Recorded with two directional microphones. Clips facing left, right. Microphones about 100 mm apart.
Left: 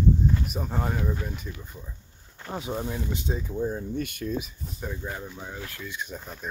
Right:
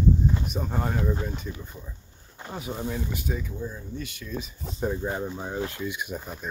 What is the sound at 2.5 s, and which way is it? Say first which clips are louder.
Speech: left 1 dB; 20° left (ahead or behind).